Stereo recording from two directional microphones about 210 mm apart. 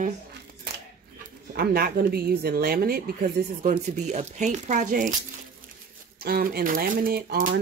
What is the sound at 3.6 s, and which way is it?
Speech, 35° right (ahead or behind).